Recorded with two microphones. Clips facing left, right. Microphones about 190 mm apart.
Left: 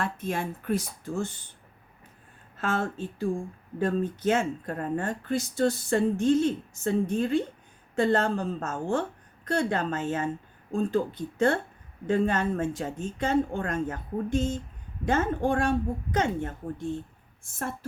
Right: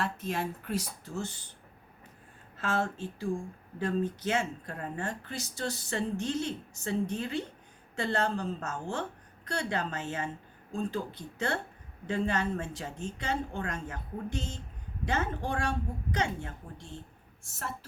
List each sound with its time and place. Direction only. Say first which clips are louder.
0.0 s speech: left 3 dB; 50° left (ahead or behind)
2.6 s speech: left 3 dB; 50° left (ahead or behind)